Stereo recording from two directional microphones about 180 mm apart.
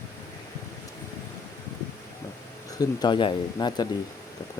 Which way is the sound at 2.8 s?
25° left (ahead or behind).